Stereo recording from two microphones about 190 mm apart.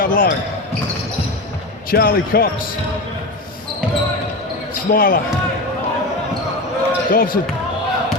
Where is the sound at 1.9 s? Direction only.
50° left (ahead or behind).